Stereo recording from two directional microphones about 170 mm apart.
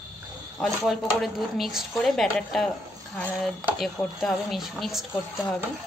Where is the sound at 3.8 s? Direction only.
Centre (ahead or behind).